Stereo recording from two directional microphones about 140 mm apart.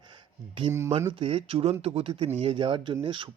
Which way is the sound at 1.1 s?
40° right (ahead or behind).